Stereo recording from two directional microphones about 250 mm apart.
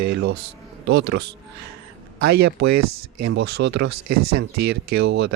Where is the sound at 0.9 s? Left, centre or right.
Right.